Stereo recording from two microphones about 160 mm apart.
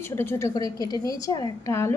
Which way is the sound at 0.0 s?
15° left (ahead or behind).